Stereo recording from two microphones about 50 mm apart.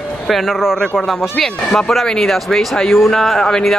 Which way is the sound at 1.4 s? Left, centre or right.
Centre.